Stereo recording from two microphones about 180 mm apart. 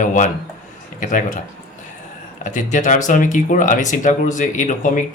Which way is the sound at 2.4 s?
45° left (ahead or behind).